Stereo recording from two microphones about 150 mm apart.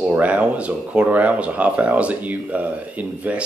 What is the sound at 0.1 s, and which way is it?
Speech, 10° right (ahead or behind).